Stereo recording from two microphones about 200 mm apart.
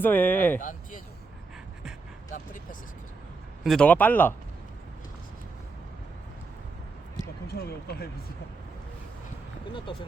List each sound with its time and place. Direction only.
0.0 s speech: 10° left (ahead or behind)
0.6 s speech: 40° left (ahead or behind)
3.6 s speech: centre (ahead or behind)
7.2 s a sound: 55° left (ahead or behind)